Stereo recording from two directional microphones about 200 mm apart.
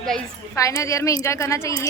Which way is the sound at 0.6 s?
15° left (ahead or behind).